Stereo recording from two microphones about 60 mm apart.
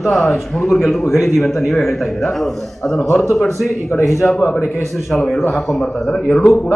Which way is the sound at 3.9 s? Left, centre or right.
Left.